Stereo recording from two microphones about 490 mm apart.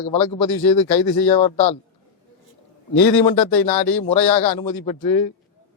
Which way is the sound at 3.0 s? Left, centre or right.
Left.